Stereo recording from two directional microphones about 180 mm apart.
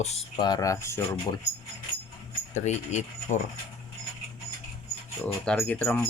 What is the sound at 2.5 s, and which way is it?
Speech, 40° left (ahead or behind).